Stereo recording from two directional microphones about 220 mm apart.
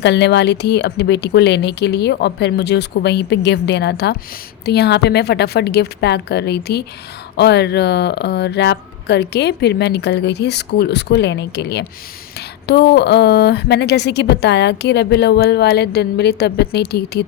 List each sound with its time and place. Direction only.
0.0 s speech: 50° left (ahead or behind)